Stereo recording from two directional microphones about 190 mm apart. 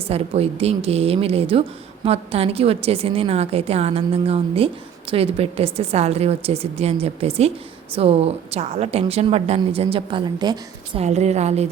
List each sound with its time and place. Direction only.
0.1 s a woman's voice: 35° right (ahead or behind)
11.0 s a woman's voice: 35° right (ahead or behind)